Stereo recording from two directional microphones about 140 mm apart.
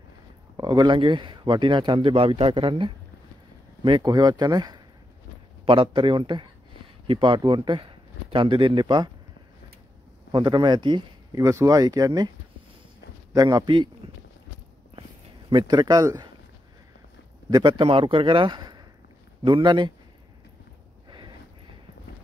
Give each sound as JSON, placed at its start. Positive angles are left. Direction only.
{"t": 0.6, "sound": "speech", "side_deg": -30}
{"t": 10.3, "sound": "speech", "side_deg": -30}
{"t": 11.4, "sound": "speech", "side_deg": -20}
{"t": 13.3, "sound": "a man's voice", "side_deg": -25}
{"t": 15.5, "sound": "speech", "side_deg": -30}
{"t": 17.5, "sound": "speech", "side_deg": -30}
{"t": 21.1, "sound": "a sound", "side_deg": -35}